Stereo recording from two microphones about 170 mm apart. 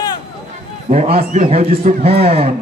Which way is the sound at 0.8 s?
40° right (ahead or behind).